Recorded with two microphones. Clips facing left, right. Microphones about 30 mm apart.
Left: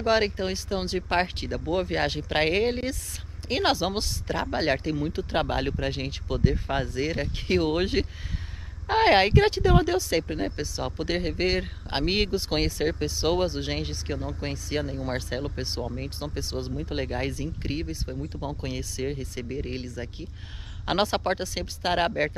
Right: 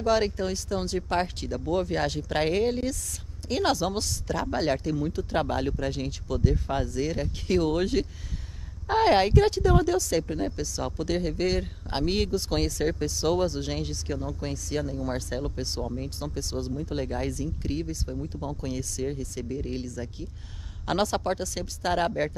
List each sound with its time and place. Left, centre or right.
0.0 s speech: left